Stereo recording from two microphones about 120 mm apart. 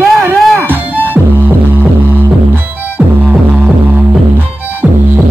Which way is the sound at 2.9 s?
15° right (ahead or behind).